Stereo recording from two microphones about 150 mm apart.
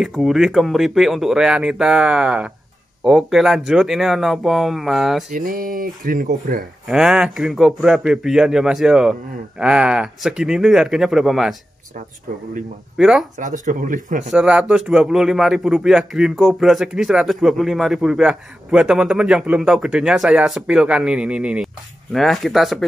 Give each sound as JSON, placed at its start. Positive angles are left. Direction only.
{"t": 0.0, "sound": "a man's voice", "side_deg": 0}
{"t": 5.3, "sound": "speech", "side_deg": -65}
{"t": 6.9, "sound": "a man's voice", "side_deg": -5}
{"t": 12.9, "sound": "a man's voice", "side_deg": 0}
{"t": 13.4, "sound": "speech", "side_deg": -60}
{"t": 14.3, "sound": "a man's voice", "side_deg": -5}